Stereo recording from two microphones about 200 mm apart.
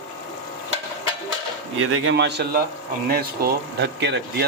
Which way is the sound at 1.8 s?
75° right (ahead or behind).